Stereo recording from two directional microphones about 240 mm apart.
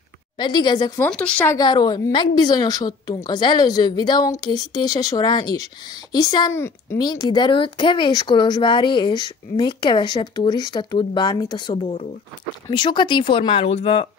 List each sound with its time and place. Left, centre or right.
0.4 s a woman's voice: centre